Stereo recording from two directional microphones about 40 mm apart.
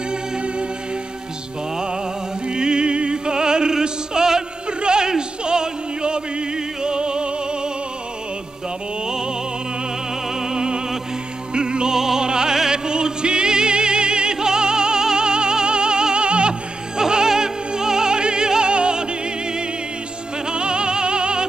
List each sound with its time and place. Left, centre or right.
0.1 s music: right
2.4 s music: right
9.0 s music: centre
10.4 s music: centre
20.4 s music: right